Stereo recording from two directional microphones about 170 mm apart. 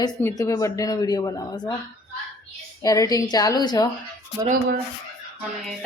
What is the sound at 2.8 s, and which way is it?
Speech, 20° left (ahead or behind).